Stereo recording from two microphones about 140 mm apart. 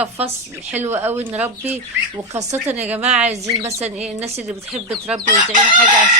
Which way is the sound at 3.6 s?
20° right (ahead or behind).